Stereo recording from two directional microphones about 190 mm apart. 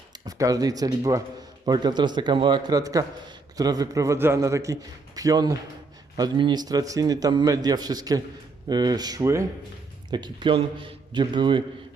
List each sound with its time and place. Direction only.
0.3 s a man's voice: 20° right (ahead or behind)